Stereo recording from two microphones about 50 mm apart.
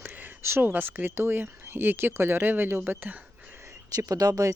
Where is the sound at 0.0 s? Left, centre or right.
Right.